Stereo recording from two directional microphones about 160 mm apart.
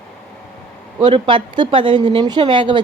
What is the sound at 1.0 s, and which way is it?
A woman's voice, 30° right (ahead or behind).